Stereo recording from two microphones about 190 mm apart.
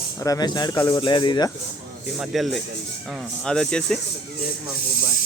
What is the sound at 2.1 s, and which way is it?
Speech, centre (ahead or behind).